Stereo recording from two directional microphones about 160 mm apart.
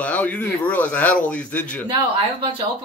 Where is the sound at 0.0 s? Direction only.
10° left (ahead or behind).